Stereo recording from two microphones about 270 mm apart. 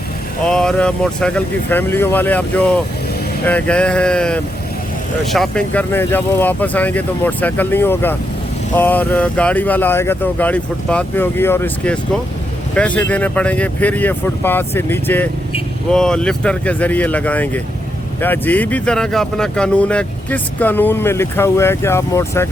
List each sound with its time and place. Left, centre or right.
0.4 s speech: centre